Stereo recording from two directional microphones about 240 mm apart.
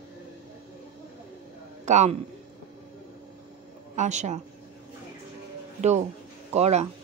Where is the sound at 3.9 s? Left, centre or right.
Right.